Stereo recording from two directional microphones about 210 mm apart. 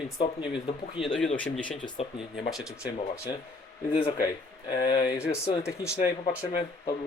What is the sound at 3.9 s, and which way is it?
Speech, 25° left (ahead or behind).